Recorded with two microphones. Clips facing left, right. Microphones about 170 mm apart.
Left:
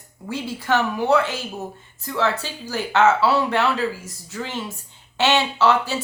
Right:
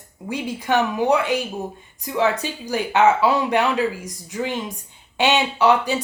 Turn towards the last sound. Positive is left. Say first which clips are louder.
# right 2 dB
turn(degrees=-15)  # may be behind; listen again after turning